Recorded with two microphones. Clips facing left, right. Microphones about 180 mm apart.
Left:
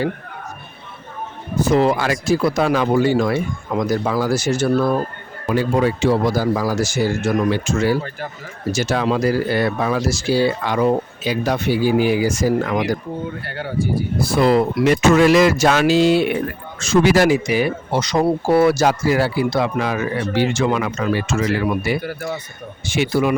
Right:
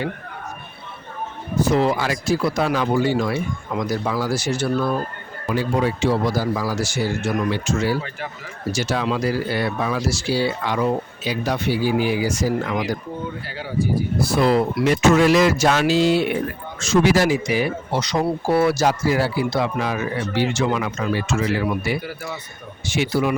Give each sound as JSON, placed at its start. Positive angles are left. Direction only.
{"t": 1.6, "sound": "speech", "side_deg": 55}
{"t": 13.4, "sound": "speech", "side_deg": 60}